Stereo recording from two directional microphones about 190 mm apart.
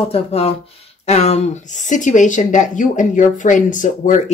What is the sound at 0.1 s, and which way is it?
Speech, 30° left (ahead or behind).